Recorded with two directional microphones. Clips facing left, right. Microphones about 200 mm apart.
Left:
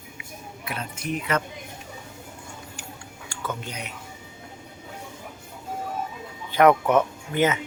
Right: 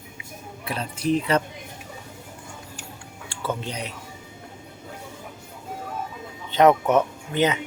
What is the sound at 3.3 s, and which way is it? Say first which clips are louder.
Speech: right 4 dB; 30° right (ahead or behind).